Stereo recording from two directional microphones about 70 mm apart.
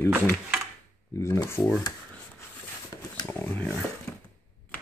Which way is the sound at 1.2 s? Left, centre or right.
Left.